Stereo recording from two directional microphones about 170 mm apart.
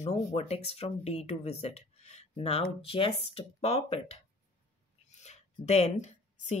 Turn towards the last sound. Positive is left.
turn(degrees=45)  # may be behind; listen again after turning